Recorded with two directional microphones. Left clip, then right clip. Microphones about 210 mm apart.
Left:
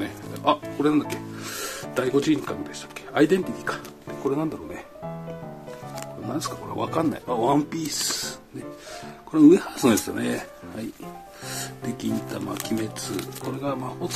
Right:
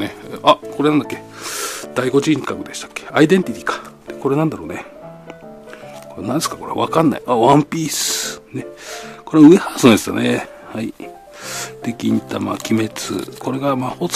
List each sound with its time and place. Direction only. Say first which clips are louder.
0.0 s speech: right 9 dB; 45° right (ahead or behind)
6.2 s speech: right 11 dB; 45° right (ahead or behind)